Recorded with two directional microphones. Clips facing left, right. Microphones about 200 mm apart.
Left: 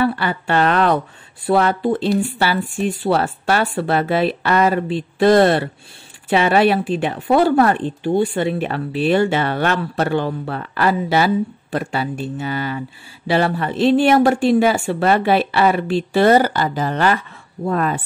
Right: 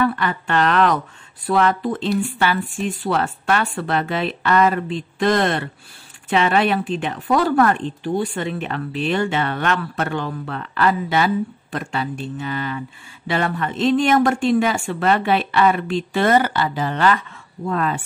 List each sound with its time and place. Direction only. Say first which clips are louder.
0.0 s speech: left 1 dB; 30° left (ahead or behind)